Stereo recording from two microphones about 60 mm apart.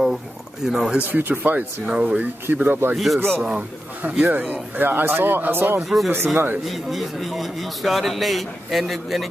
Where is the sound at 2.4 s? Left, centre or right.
Right.